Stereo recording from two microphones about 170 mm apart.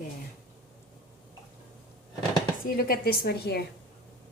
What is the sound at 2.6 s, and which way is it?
Speech, 60° left (ahead or behind).